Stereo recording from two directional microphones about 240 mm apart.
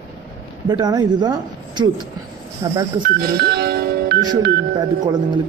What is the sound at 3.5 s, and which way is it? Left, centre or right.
Music, right.